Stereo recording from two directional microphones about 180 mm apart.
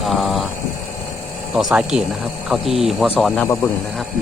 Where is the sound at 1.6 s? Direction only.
5° right (ahead or behind).